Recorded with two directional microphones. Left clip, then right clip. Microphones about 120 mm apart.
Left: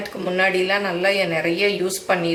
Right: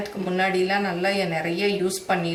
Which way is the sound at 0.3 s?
20° left (ahead or behind).